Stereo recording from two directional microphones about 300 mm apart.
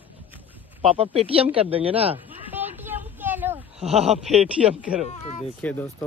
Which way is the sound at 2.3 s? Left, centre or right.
Centre.